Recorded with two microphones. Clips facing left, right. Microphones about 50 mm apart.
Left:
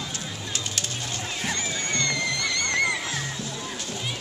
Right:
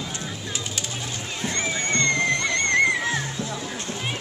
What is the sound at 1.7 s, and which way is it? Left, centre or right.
Music, right.